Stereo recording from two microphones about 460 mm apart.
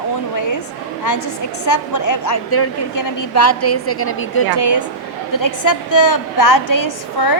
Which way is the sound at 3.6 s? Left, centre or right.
Left.